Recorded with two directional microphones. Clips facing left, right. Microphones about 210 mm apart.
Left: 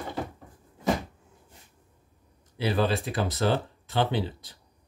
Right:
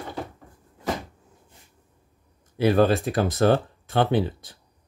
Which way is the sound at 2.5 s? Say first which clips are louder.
Right 7 dB; 50° right (ahead or behind).